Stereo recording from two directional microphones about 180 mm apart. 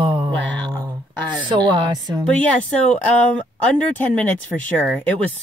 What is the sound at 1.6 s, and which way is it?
Speech, 20° right (ahead or behind).